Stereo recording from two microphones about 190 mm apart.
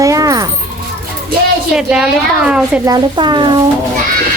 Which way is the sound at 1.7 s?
5° right (ahead or behind).